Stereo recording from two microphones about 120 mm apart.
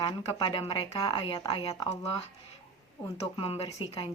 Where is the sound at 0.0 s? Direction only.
40° left (ahead or behind).